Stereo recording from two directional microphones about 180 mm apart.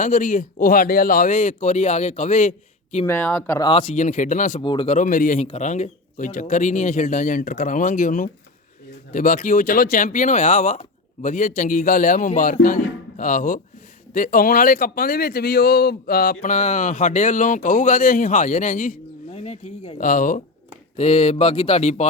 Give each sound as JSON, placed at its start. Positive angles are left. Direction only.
{"t": 0.0, "sound": "speech", "side_deg": 45}
{"t": 3.1, "sound": "speech", "side_deg": 10}
{"t": 3.6, "sound": "speech", "side_deg": 30}
{"t": 3.9, "sound": "speech", "side_deg": 45}
{"t": 4.6, "sound": "speech", "side_deg": 25}
{"t": 4.9, "sound": "speech", "side_deg": 45}